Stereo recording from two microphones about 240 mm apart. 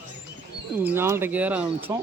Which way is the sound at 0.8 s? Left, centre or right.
Centre.